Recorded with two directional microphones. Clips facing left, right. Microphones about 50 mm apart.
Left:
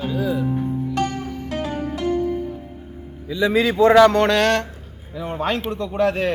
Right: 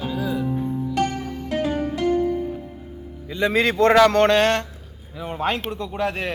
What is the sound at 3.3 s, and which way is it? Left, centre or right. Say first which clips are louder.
Speech: left 2 dB; right.